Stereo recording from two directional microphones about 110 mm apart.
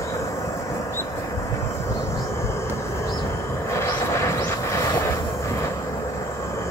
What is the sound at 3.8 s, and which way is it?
Vehicle, 25° left (ahead or behind).